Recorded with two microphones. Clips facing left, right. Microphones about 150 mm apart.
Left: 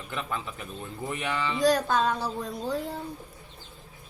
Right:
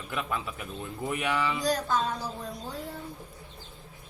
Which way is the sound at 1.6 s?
65° left (ahead or behind).